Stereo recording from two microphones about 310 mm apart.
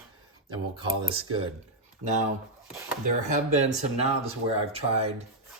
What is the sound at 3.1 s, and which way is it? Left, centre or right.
Speech, right.